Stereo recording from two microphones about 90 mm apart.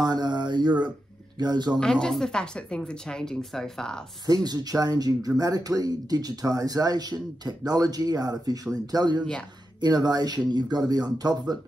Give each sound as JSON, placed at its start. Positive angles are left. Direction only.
{"t": 0.0, "sound": "speech", "side_deg": -50}
{"t": 1.8, "sound": "speech", "side_deg": 5}
{"t": 4.5, "sound": "speech", "side_deg": -45}
{"t": 9.2, "sound": "speech", "side_deg": 10}
{"t": 9.8, "sound": "speech", "side_deg": -50}